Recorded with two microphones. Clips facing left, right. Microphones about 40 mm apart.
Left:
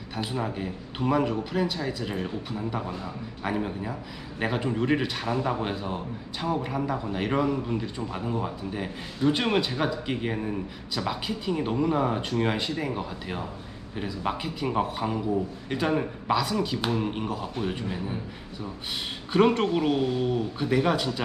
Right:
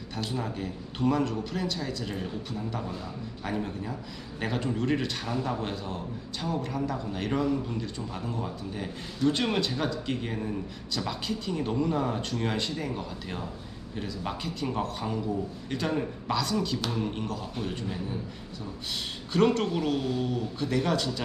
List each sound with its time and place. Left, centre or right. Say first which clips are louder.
0.2 s a man's voice: left 3 dB; centre
19.3 s speech: left 3 dB; centre